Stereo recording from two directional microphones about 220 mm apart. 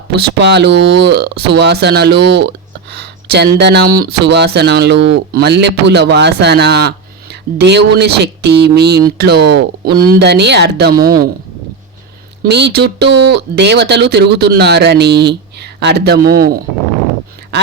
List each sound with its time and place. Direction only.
0.2 s speech: 50° right (ahead or behind)
12.4 s speech: 50° right (ahead or behind)